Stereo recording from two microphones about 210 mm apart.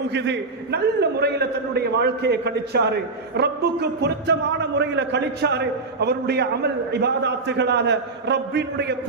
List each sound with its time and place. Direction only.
0.1 s a man's voice: 55° right (ahead or behind)